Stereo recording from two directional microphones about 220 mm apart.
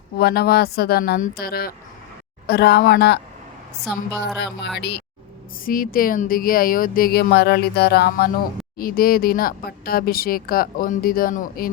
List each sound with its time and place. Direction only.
0.2 s a woman's voice: 45° left (ahead or behind)
4.4 s a woman's voice: 50° left (ahead or behind)